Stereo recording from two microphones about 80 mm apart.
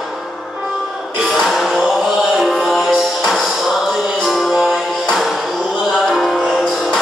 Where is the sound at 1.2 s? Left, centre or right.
Centre.